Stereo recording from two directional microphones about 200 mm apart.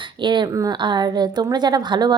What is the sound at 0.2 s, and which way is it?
A woman's voice, 20° right (ahead or behind).